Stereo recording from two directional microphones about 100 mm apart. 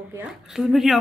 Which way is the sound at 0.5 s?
5° right (ahead or behind).